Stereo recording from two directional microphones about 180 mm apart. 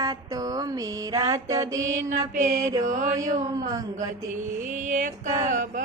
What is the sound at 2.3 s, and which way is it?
Mantra, 45° right (ahead or behind).